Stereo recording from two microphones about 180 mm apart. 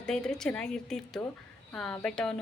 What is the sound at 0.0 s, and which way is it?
A woman's voice, 5° left (ahead or behind).